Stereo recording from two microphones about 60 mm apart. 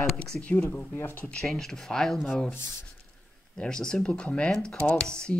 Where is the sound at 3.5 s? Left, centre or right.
Centre.